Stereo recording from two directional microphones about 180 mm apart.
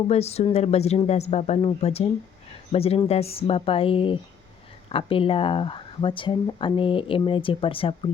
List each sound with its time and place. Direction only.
0.1 s speech: 35° left (ahead or behind)